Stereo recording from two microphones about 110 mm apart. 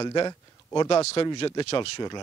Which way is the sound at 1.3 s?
45° left (ahead or behind).